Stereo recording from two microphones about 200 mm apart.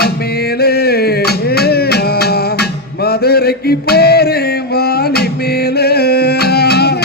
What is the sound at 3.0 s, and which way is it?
Male singing, 50° left (ahead or behind).